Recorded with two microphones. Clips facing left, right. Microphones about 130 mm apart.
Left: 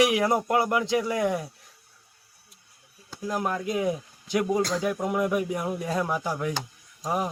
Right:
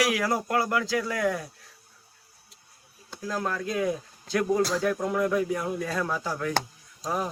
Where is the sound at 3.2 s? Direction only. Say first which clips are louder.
Left 2 dB; 20° left (ahead or behind).